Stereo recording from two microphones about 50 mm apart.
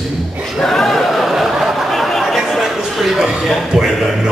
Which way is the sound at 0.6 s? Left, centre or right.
Centre.